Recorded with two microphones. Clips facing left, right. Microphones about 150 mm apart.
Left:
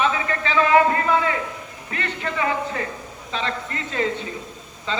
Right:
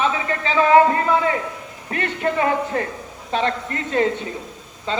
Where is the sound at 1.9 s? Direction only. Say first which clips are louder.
Right 6 dB; 50° right (ahead or behind).